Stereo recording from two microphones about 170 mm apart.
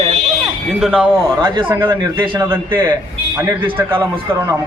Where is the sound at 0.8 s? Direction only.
5° right (ahead or behind).